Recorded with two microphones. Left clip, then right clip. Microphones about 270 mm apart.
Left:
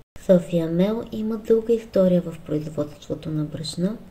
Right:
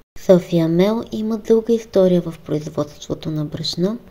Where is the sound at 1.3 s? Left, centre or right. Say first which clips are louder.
Right 3 dB; right.